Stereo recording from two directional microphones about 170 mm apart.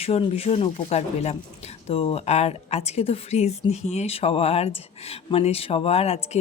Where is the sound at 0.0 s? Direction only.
35° left (ahead or behind).